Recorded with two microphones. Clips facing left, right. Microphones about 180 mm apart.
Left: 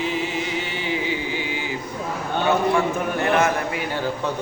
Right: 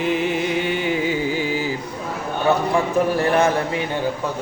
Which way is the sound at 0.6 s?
50° right (ahead or behind).